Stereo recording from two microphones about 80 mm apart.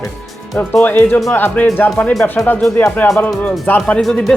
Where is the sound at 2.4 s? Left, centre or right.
Centre.